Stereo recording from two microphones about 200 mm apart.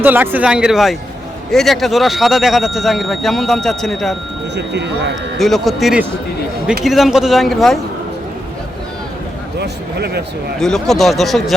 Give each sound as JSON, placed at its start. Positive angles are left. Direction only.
{"t": 0.0, "sound": "speech", "side_deg": -10}
{"t": 4.5, "sound": "speech", "side_deg": -60}
{"t": 5.4, "sound": "speech", "side_deg": 0}
{"t": 9.6, "sound": "speech", "side_deg": -55}
{"t": 10.6, "sound": "speech", "side_deg": 0}